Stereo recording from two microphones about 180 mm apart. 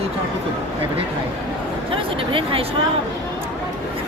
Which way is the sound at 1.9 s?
30° right (ahead or behind).